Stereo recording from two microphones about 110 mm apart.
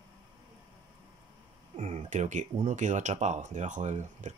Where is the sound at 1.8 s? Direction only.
90° right.